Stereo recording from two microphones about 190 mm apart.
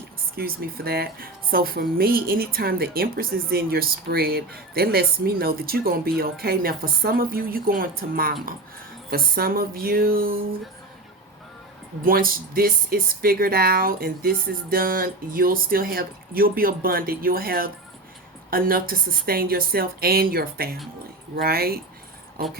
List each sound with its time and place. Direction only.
0.3 s speech: 50° right (ahead or behind)
12.0 s speech: 50° right (ahead or behind)